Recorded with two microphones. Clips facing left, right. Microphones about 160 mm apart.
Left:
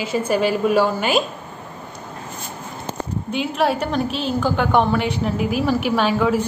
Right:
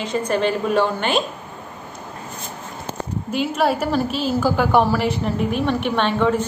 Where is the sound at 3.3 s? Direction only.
Centre (ahead or behind).